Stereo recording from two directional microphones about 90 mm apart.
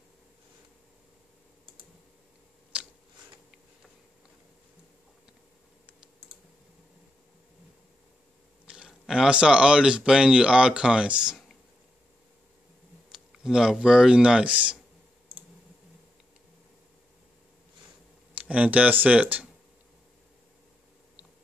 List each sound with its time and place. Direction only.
2.7 s a sound: 10° right (ahead or behind)
8.6 s speech: 5° right (ahead or behind)
13.1 s speech: 5° right (ahead or behind)
18.3 s speech: 15° right (ahead or behind)